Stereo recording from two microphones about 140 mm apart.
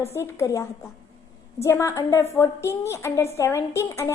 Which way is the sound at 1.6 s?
20° left (ahead or behind).